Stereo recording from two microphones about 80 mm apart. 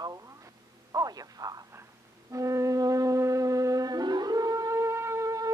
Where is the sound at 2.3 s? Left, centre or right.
Right.